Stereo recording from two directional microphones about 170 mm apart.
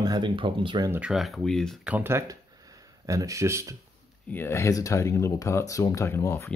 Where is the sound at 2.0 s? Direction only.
15° right (ahead or behind).